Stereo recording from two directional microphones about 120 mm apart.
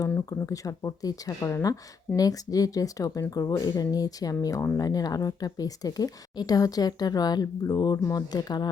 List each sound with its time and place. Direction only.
0.3 s speech: 30° left (ahead or behind)